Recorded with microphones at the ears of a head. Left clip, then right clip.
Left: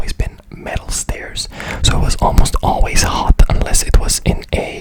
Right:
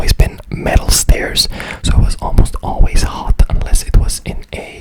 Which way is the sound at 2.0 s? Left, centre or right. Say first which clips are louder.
Left 5 dB; left.